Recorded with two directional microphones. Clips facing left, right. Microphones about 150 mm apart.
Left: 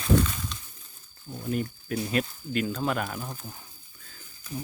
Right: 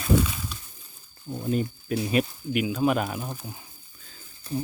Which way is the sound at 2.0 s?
15° right (ahead or behind).